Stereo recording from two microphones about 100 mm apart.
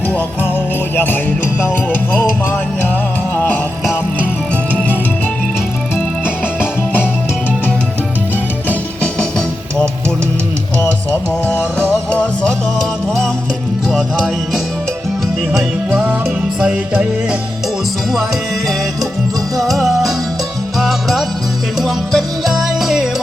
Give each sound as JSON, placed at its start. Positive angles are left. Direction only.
{"t": 0.9, "sound": "jingle bell", "side_deg": 20}
{"t": 1.6, "sound": "music", "side_deg": 20}
{"t": 3.3, "sound": "music", "side_deg": 20}
{"t": 6.2, "sound": "music", "side_deg": 20}
{"t": 11.1, "sound": "music", "side_deg": 20}
{"t": 15.5, "sound": "music", "side_deg": -5}
{"t": 19.5, "sound": "music", "side_deg": 0}